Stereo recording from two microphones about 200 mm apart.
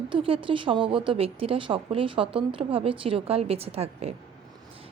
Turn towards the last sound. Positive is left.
turn(degrees=-30)  # may be behind; listen again after turning